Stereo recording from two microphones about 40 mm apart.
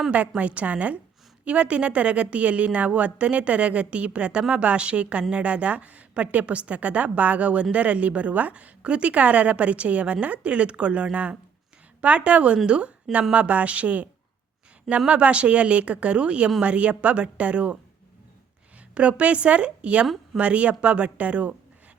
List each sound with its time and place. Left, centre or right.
0.1 s a woman's voice: right
18.9 s a woman's voice: right